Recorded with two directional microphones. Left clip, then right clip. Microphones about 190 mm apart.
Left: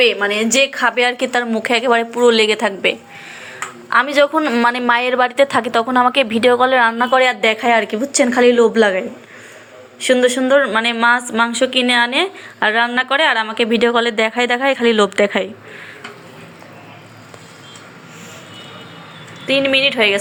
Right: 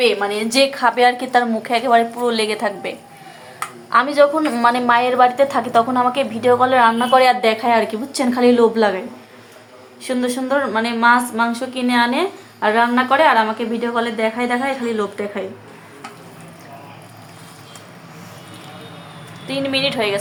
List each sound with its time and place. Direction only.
0.0 s a woman's voice: 10° left (ahead or behind)
4.6 s a woman's voice: 20° left (ahead or behind); by 15.4 s 35° left (ahead or behind)
19.5 s a woman's voice: 15° left (ahead or behind)